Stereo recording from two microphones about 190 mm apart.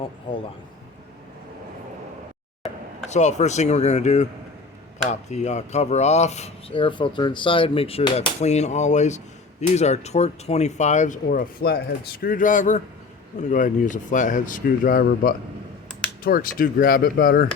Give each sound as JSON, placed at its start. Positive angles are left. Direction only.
{"t": 3.1, "sound": "speech", "side_deg": 35}